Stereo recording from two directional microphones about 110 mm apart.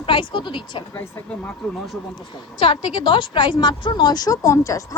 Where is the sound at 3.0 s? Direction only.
45° left (ahead or behind); by 4.8 s 30° left (ahead or behind).